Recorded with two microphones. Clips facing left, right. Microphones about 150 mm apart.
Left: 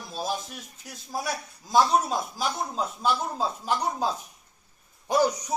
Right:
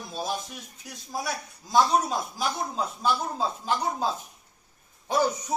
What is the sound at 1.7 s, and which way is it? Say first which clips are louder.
A man's voice: left 1 dB; 5° left (ahead or behind).